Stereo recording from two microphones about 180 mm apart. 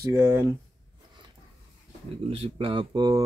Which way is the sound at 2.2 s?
30° right (ahead or behind).